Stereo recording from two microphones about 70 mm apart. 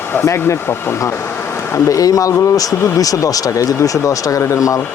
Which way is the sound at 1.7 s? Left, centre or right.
Left.